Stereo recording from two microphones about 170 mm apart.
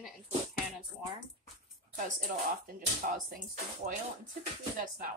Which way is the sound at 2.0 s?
50° right (ahead or behind).